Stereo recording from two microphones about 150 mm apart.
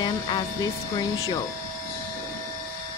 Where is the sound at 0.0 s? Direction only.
25° left (ahead or behind).